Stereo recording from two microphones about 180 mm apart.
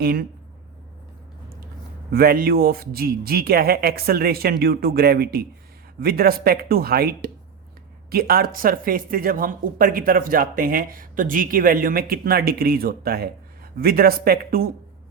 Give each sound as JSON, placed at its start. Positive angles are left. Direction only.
{"t": 0.0, "sound": "speech", "side_deg": -60}
{"t": 2.1, "sound": "speech", "side_deg": -55}